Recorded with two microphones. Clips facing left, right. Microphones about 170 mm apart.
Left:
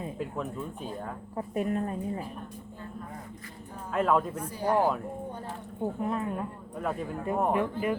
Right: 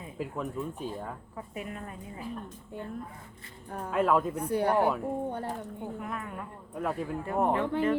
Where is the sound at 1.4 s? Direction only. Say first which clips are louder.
Left 11 dB; 40° left (ahead or behind).